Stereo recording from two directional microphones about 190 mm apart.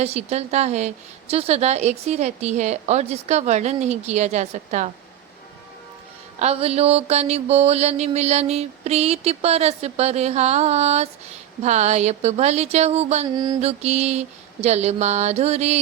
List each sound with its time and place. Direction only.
0.0 s a woman's voice: 35° right (ahead or behind)
6.4 s a woman's voice: 30° right (ahead or behind)
13.2 s mantra: 20° right (ahead or behind)
13.6 s a woman's voice: 35° right (ahead or behind)